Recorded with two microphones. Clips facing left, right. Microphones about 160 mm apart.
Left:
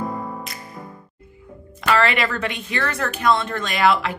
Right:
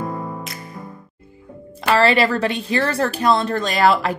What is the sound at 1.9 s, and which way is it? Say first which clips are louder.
A woman's voice: right 4 dB; 35° right (ahead or behind).